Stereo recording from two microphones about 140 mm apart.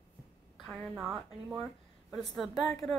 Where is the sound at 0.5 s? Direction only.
Centre (ahead or behind).